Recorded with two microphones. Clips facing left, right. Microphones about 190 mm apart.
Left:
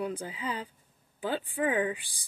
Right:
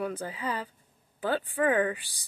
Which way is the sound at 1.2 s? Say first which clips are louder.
Right 3 dB; 15° left (ahead or behind).